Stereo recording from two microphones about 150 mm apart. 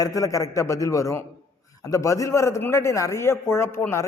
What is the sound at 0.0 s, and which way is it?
A man's voice, 20° left (ahead or behind).